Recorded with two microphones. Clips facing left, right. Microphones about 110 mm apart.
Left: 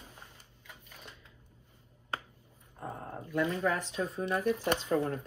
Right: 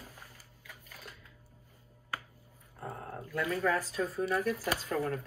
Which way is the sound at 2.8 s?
20° left (ahead or behind).